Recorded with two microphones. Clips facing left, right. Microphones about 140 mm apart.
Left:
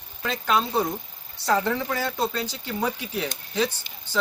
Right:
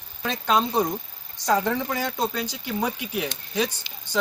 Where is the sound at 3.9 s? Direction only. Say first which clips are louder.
Right 1 dB; 45° left (ahead or behind).